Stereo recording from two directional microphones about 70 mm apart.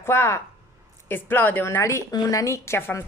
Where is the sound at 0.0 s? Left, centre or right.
Left.